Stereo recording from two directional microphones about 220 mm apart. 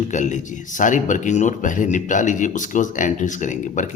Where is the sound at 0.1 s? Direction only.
35° left (ahead or behind).